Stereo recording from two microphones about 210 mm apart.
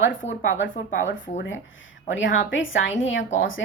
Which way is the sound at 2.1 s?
65° left (ahead or behind).